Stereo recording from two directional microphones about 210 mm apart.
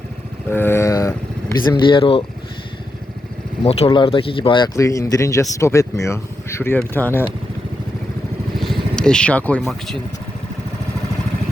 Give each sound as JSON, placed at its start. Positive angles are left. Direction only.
{"t": 0.5, "sound": "vehicle", "side_deg": 10}
{"t": 1.7, "sound": "speech", "side_deg": 25}
{"t": 3.6, "sound": "speech", "side_deg": 30}
{"t": 8.5, "sound": "speech", "side_deg": 0}